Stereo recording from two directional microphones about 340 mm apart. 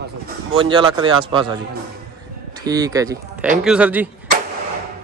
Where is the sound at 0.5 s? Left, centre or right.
Centre.